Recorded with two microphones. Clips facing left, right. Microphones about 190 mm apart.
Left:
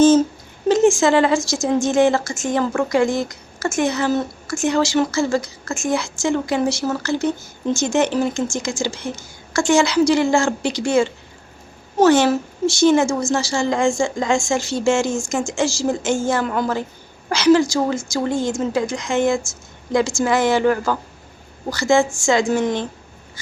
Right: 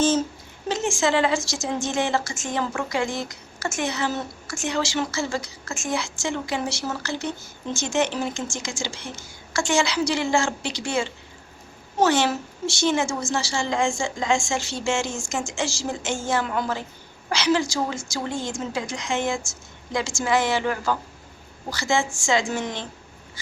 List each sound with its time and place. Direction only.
0.7 s a woman's voice: 45° left (ahead or behind)